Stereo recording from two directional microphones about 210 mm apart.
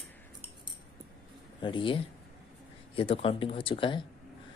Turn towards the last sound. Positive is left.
turn(degrees=25)  # may be behind; listen again after turning